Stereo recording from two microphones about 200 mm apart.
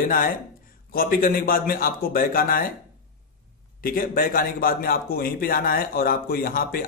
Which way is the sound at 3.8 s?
45° left (ahead or behind).